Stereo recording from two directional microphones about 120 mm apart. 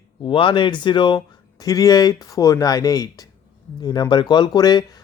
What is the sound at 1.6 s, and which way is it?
Speech, 30° left (ahead or behind).